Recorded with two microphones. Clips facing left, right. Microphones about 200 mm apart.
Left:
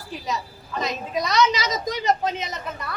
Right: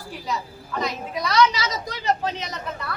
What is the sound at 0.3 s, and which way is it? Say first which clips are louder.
A woman's voice: right 1 dB; 20° left (ahead or behind).